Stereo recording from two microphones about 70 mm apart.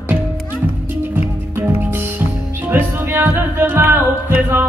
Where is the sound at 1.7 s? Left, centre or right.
Right.